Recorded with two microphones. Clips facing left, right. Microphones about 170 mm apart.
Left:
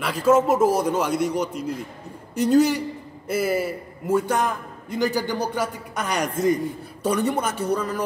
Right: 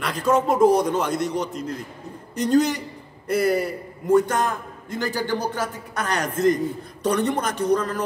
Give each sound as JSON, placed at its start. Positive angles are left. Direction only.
{"t": 0.0, "sound": "a man's voice", "side_deg": 5}